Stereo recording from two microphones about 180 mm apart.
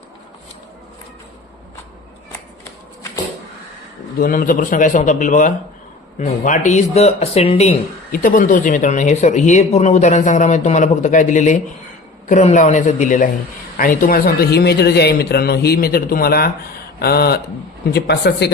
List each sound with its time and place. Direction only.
4.2 s speech: 50° left (ahead or behind)
8.1 s speech: 50° left (ahead or behind)